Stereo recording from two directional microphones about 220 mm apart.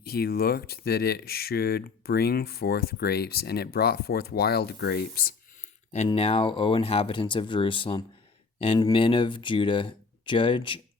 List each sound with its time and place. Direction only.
0.0 s speech: 45° left (ahead or behind)
6.1 s speech: 25° left (ahead or behind)